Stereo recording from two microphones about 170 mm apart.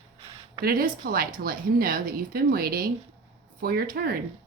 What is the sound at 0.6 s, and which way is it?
Speech, 60° right (ahead or behind).